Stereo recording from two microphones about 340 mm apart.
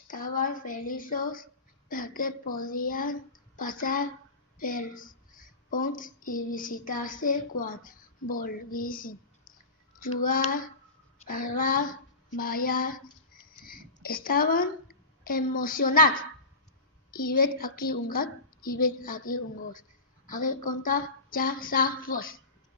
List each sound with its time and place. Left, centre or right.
0.1 s a woman's voice: left